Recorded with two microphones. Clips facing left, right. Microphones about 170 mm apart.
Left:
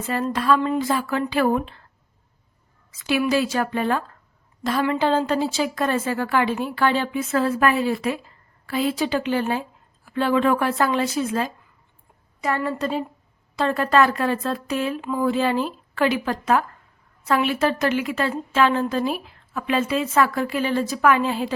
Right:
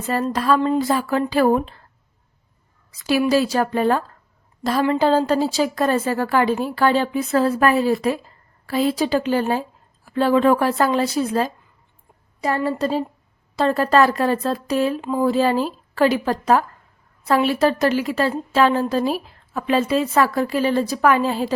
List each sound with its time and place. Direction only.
0.3 s a woman's voice: 35° right (ahead or behind)
2.9 s a woman's voice: 35° right (ahead or behind)